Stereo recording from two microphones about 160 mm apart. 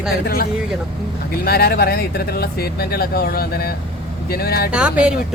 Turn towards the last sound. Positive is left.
turn(degrees=-5)  # may be behind; listen again after turning